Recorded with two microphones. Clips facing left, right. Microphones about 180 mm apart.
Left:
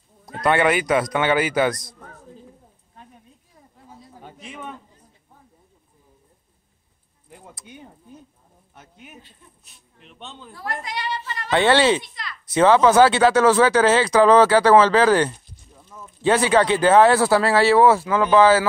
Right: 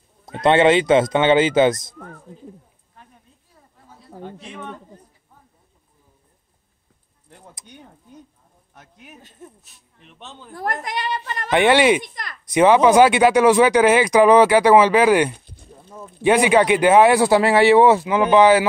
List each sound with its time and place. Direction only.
0.2 s speech: 25° right (ahead or behind)
4.2 s a sound: 10° left (ahead or behind)
7.7 s speech: 5° left (ahead or behind)
10.5 s a woman's voice: 50° right (ahead or behind)
11.5 s speech: 15° right (ahead or behind)
12.0 s a woman's voice: 45° right (ahead or behind)
12.4 s speech: 15° right (ahead or behind)
15.4 s a sound: 60° right (ahead or behind)
16.2 s speech: 15° right (ahead or behind)